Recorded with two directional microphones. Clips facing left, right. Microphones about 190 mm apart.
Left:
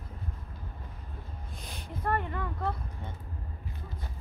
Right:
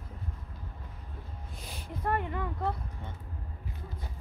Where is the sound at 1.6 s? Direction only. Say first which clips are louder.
Even; 5° right (ahead or behind).